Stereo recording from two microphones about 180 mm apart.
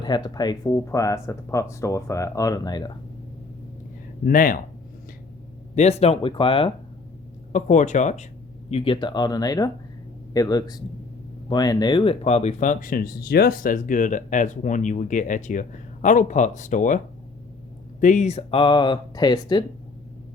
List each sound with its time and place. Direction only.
0.0 s speech: 25° left (ahead or behind)
4.3 s speech: 50° left (ahead or behind)
5.7 s speech: 35° left (ahead or behind)
7.5 s speech: 40° left (ahead or behind)
8.7 s speech: 30° left (ahead or behind); by 17.0 s 45° left (ahead or behind)
18.0 s speech: 40° left (ahead or behind); by 19.6 s 25° left (ahead or behind)